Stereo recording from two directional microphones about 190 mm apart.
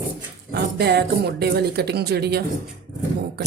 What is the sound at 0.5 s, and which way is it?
Speech, 60° right (ahead or behind).